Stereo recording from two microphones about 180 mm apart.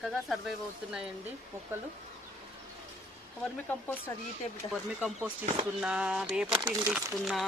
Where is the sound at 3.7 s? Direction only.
10° left (ahead or behind).